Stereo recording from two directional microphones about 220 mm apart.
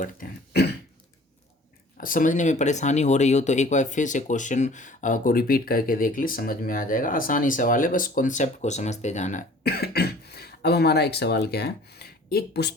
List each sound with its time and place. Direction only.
0.0 s speech: 45° left (ahead or behind)
2.0 s speech: 40° left (ahead or behind)